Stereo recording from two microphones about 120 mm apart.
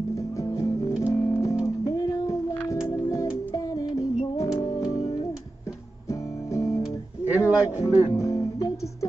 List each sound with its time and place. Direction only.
0.1 s music: 25° left (ahead or behind)
4.6 s organ: 30° left (ahead or behind)
6.0 s music: 25° left (ahead or behind)
7.2 s a sound: 15° right (ahead or behind)
7.7 s music: 25° left (ahead or behind)